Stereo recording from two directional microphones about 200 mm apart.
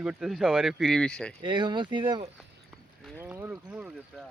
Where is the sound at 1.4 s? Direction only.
25° right (ahead or behind).